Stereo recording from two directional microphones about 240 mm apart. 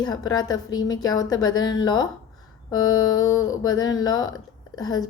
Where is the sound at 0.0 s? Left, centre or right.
Centre.